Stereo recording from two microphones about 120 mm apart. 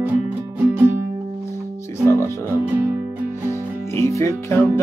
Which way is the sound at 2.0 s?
20° right (ahead or behind).